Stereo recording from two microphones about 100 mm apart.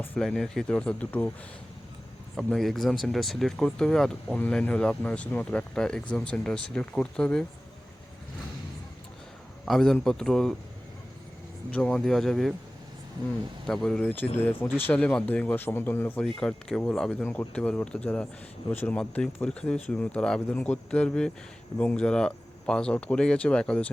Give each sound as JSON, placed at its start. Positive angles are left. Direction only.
{"t": 0.2, "sound": "speech", "side_deg": 5}
{"t": 2.3, "sound": "speech", "side_deg": 0}
{"t": 9.6, "sound": "speech", "side_deg": 5}
{"t": 11.7, "sound": "speech", "side_deg": 10}
{"t": 13.7, "sound": "speech", "side_deg": 5}
{"t": 16.2, "sound": "speech", "side_deg": 5}
{"t": 18.7, "sound": "speech", "side_deg": 20}
{"t": 18.9, "sound": "speech", "side_deg": 10}